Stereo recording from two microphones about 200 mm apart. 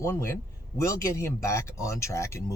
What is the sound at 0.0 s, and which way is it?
Speech, 15° left (ahead or behind).